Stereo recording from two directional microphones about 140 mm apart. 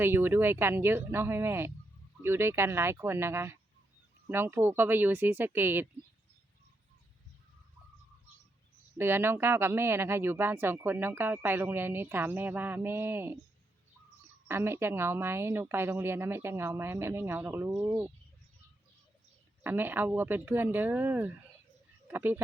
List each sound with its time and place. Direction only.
0.0 s speech: 15° right (ahead or behind)
9.0 s speech: 15° right (ahead or behind)
14.4 s speech: 15° right (ahead or behind)
19.6 s speech: 15° right (ahead or behind)
22.0 s a sound: 15° right (ahead or behind)